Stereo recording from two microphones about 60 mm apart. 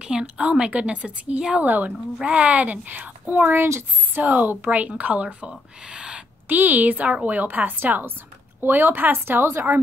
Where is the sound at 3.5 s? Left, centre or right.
Right.